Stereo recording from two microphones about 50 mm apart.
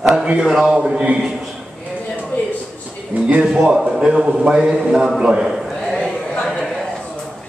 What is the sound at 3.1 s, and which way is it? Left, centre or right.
Speech, right.